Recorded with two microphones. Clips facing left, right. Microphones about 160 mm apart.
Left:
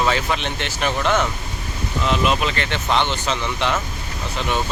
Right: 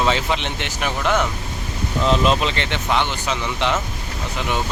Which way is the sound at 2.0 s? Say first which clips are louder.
Right 2 dB; 30° right (ahead or behind).